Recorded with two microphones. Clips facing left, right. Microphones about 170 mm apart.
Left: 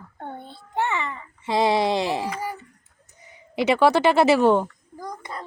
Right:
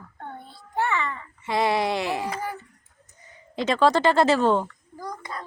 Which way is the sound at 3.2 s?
10° left (ahead or behind).